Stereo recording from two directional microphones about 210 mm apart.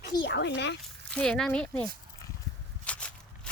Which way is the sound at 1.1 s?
5° left (ahead or behind).